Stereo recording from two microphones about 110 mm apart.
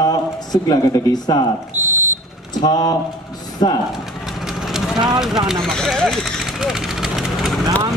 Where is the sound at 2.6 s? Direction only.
35° left (ahead or behind).